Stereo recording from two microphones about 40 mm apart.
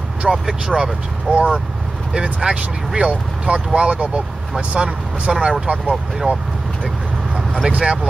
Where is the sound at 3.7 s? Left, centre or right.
Right.